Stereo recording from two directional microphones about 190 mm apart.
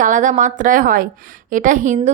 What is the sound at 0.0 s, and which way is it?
A woman's voice, 40° right (ahead or behind).